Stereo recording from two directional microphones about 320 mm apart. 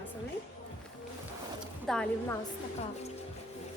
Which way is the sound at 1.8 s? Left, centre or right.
Centre.